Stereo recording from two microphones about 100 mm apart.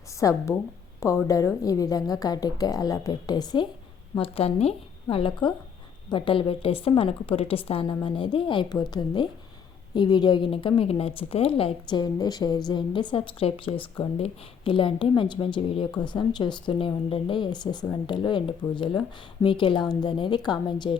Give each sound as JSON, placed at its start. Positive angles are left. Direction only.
{"t": 0.2, "sound": "a woman's voice", "side_deg": 35}
{"t": 4.2, "sound": "speech", "side_deg": 75}
{"t": 5.1, "sound": "a woman's voice", "side_deg": 60}
{"t": 11.9, "sound": "a woman's voice", "side_deg": 45}
{"t": 16.0, "sound": "a woman's voice", "side_deg": 50}
{"t": 16.7, "sound": "a woman's voice", "side_deg": 60}